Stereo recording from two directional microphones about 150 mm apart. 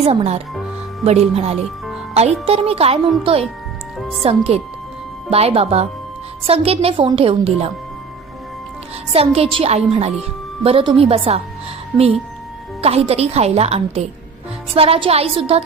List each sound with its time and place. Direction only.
0.0 s a woman's voice: 40° right (ahead or behind)
3.9 s music: centre (ahead or behind)
4.2 s a woman's voice: 40° right (ahead or behind)
9.1 s a woman's voice: 40° right (ahead or behind)
12.8 s a woman's voice: 40° right (ahead or behind)